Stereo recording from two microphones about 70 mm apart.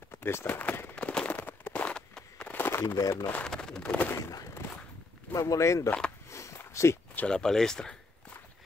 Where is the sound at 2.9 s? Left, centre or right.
Left.